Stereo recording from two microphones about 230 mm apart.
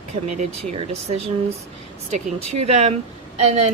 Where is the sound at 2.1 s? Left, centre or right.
Right.